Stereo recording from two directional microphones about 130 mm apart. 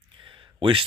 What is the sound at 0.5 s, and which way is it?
Speech, 40° right (ahead or behind).